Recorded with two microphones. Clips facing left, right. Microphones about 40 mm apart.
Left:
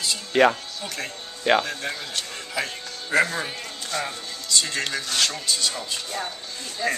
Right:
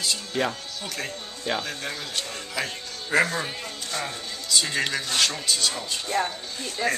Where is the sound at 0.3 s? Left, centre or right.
Left.